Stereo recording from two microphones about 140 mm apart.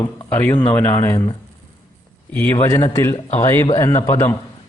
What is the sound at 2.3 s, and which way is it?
A man's voice, 15° left (ahead or behind).